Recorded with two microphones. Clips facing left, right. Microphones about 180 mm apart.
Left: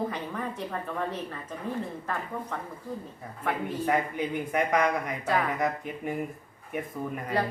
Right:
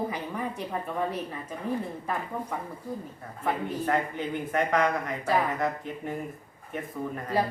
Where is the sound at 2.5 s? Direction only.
10° right (ahead or behind).